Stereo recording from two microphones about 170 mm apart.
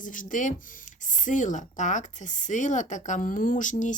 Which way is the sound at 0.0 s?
50° left (ahead or behind).